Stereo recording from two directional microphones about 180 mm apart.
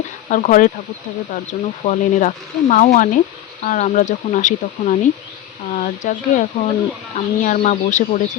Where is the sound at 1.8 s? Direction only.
40° left (ahead or behind).